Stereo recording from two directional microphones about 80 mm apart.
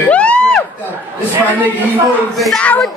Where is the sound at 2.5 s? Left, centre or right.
Centre.